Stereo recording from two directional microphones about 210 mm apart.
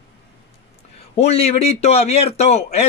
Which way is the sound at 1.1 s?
30° left (ahead or behind).